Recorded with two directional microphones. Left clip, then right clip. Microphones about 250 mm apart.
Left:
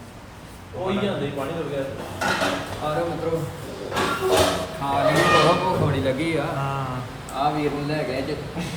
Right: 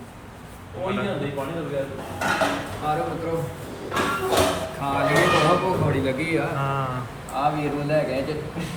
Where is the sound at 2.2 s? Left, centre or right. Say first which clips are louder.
Even; centre.